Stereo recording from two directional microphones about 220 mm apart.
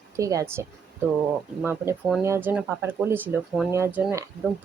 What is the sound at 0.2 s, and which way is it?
Speech, 15° right (ahead or behind).